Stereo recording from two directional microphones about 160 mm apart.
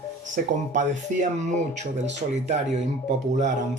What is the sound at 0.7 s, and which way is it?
Speech, 50° right (ahead or behind).